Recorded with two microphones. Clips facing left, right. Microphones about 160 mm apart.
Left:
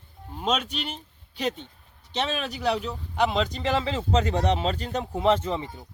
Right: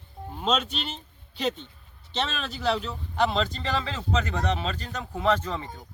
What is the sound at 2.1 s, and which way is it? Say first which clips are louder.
Speech: left 2 dB; 10° left (ahead or behind).